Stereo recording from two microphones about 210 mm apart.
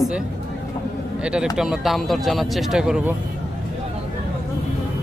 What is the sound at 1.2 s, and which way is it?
Speech, 5° right (ahead or behind).